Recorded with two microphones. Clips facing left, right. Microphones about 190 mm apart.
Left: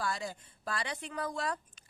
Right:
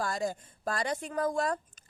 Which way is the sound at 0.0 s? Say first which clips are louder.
Right 5 dB; 45° right (ahead or behind).